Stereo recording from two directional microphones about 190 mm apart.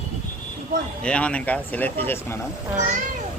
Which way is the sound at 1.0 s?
5° left (ahead or behind).